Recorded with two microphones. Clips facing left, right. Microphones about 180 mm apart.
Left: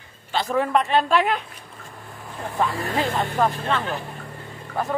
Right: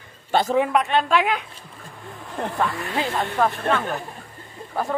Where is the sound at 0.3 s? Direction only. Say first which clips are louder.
Right 5 dB; 45° right (ahead or behind).